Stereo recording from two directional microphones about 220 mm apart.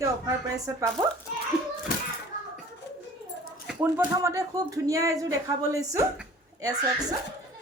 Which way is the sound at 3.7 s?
10° right (ahead or behind).